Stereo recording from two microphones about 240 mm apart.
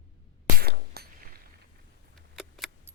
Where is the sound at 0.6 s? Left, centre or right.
Right.